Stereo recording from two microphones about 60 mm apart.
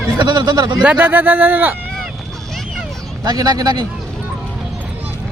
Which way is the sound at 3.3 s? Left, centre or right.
Right.